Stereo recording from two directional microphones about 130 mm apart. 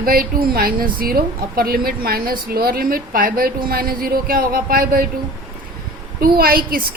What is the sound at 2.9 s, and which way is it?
A woman's voice, 90° right.